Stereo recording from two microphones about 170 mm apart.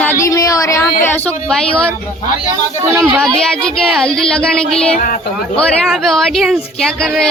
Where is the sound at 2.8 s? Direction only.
15° right (ahead or behind).